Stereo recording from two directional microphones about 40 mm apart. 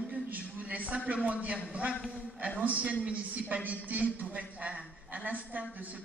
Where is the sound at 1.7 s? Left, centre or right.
Right.